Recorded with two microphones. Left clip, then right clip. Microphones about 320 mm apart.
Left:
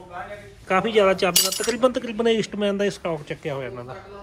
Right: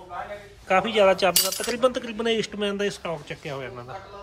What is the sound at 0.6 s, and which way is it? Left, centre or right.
Speech, centre.